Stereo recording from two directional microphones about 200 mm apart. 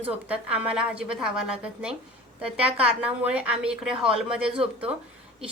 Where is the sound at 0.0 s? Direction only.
5° right (ahead or behind).